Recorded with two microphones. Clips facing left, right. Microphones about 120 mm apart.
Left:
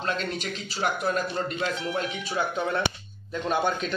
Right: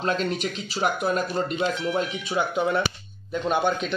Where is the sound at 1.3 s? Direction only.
20° right (ahead or behind).